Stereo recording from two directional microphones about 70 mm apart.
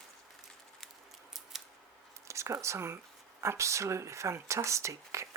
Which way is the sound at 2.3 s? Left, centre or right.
Right.